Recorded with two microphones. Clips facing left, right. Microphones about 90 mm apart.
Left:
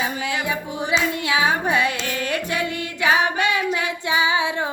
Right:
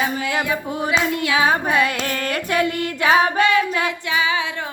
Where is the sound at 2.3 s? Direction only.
40° right (ahead or behind).